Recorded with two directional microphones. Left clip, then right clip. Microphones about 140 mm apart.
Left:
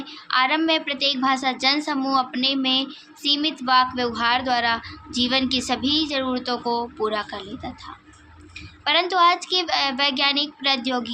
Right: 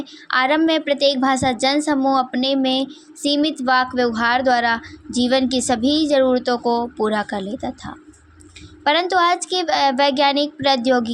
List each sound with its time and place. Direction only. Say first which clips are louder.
0.0 s child singing: right 2 dB; 50° right (ahead or behind)
8.8 s child singing: right 2 dB; 50° right (ahead or behind)